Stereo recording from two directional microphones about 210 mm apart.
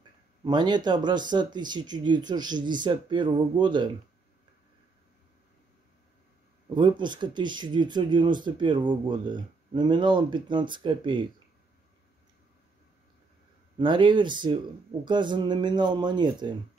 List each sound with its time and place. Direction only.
0.4 s speech: 20° right (ahead or behind)
6.7 s speech: 20° right (ahead or behind)
13.7 s speech: 20° right (ahead or behind)